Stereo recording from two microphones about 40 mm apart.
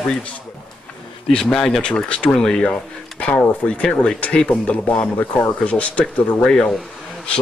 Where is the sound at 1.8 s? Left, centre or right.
Left.